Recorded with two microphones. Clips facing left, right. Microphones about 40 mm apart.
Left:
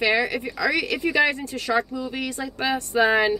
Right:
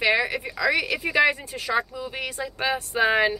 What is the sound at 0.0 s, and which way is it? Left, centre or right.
Speech, centre.